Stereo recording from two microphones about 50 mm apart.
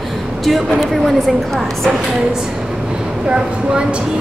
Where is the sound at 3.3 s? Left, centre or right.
Centre.